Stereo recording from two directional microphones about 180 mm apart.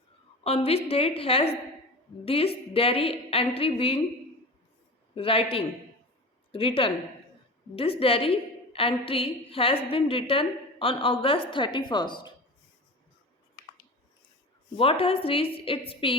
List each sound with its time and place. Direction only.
0.4 s a woman's voice: 35° left (ahead or behind)
5.1 s a woman's voice: 30° left (ahead or behind)
14.8 s a woman's voice: 30° left (ahead or behind)